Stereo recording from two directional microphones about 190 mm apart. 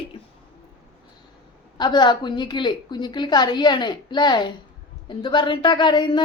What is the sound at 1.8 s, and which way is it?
Speech, 25° left (ahead or behind).